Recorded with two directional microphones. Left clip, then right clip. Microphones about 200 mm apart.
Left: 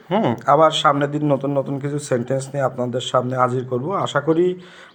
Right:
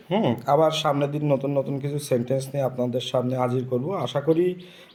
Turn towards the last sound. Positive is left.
turn(degrees=5)  # may be behind; listen again after turning